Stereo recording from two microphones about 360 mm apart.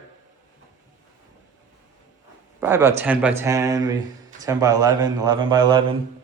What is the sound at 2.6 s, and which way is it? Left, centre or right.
Speech, centre.